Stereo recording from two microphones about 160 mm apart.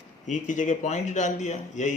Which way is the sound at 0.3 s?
50° left (ahead or behind).